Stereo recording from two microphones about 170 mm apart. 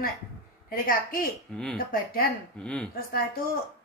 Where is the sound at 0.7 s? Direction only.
55° left (ahead or behind).